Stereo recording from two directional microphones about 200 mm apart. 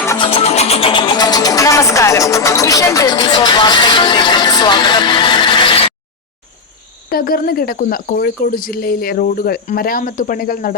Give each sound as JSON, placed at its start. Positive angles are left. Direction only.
{"t": 0.2, "sound": "speech", "side_deg": 30}
{"t": 7.1, "sound": "speech", "side_deg": 45}